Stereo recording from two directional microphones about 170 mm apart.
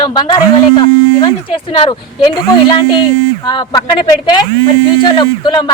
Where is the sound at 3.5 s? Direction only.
25° left (ahead or behind).